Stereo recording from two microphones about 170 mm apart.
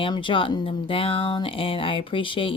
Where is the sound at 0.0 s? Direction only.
30° left (ahead or behind).